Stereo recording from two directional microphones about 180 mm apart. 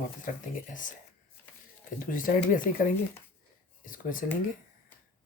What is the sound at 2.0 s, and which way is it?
Speech, 45° left (ahead or behind).